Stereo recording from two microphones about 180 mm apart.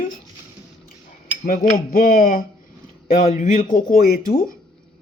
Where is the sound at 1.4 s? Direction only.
50° left (ahead or behind).